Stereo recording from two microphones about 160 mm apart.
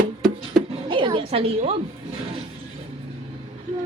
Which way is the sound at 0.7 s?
30° right (ahead or behind).